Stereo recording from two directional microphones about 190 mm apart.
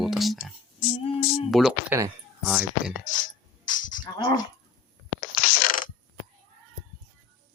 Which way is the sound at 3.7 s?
45° left (ahead or behind).